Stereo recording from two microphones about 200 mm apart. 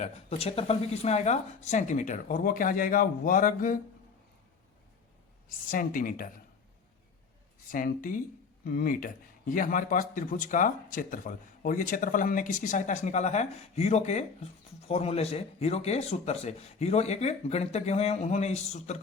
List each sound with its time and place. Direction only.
0.0 s a man's voice: 30° left (ahead or behind)
5.6 s speech: 45° left (ahead or behind)
7.7 s a man's voice: 45° left (ahead or behind)